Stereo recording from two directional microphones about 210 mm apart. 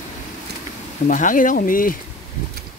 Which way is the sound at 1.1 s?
40° left (ahead or behind).